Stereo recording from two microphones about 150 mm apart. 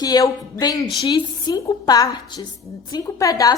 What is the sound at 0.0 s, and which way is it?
A woman's voice, 25° left (ahead or behind).